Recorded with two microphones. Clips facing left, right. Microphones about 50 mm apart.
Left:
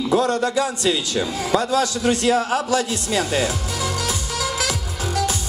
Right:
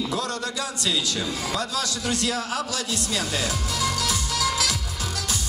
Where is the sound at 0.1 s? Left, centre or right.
Left.